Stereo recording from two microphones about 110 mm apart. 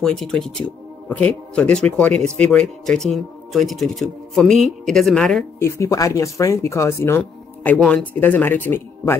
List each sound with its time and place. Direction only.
0.0 s speech: 5° left (ahead or behind)
5.6 s speech: 25° left (ahead or behind)